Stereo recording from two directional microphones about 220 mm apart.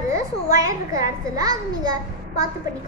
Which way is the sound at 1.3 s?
15° right (ahead or behind).